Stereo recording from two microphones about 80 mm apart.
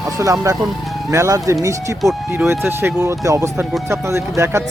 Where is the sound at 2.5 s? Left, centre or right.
Right.